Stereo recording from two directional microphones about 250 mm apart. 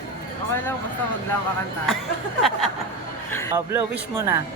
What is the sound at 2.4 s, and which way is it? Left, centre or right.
Speech, centre.